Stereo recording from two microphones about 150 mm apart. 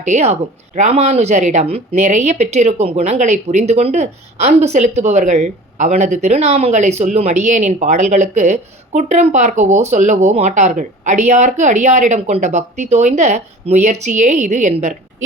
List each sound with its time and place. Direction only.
0.0 s speech: 50° right (ahead or behind)